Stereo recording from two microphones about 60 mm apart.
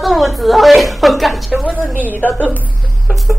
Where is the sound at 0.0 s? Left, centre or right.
Centre.